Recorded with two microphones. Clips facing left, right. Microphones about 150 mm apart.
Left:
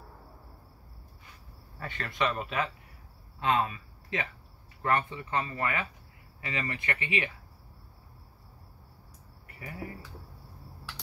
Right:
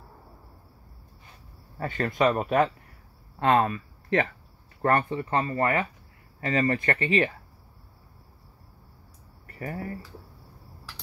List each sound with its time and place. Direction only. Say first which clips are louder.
1.8 s speech: right 7 dB; 40° right (ahead or behind)
9.5 s speech: right 7 dB; 45° right (ahead or behind)